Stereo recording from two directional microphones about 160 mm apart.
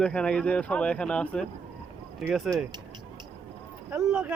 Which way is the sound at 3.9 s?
5° right (ahead or behind).